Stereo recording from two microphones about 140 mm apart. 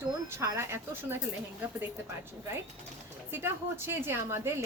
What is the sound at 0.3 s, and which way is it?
Speech, 20° right (ahead or behind).